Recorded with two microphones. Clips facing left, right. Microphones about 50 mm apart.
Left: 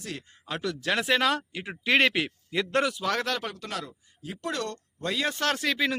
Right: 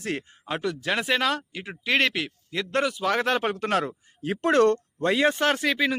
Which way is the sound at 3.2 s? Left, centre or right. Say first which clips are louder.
Right 7 dB; right.